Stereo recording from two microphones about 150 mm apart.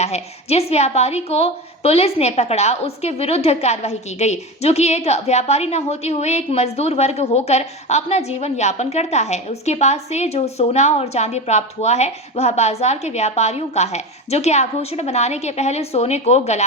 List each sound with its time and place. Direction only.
0.0 s a woman's voice: 45° left (ahead or behind)